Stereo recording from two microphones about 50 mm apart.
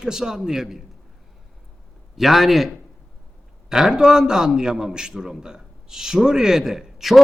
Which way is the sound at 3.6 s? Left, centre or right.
Centre.